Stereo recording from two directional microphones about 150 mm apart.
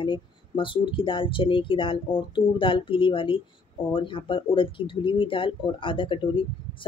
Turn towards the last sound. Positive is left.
turn(degrees=35)  # may be behind; listen again after turning